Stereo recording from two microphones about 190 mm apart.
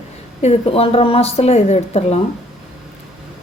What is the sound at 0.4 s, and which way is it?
A woman's voice, 30° left (ahead or behind).